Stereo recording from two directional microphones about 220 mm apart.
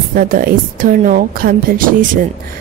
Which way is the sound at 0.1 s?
40° right (ahead or behind).